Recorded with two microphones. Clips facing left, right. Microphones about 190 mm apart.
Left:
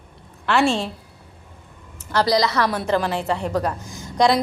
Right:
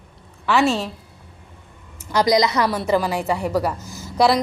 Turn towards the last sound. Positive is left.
turn(degrees=-5)  # may be behind; listen again after turning